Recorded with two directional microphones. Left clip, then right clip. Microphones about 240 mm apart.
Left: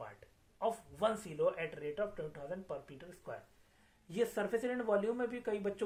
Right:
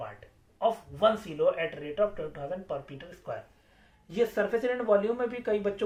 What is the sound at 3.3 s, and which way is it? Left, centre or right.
Speech, left.